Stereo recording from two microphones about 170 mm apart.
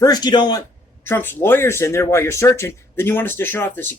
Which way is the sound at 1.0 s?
10° left (ahead or behind).